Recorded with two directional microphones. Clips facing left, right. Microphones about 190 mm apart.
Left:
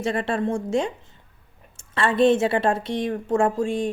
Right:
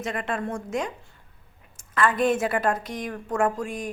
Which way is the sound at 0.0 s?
30° left (ahead or behind).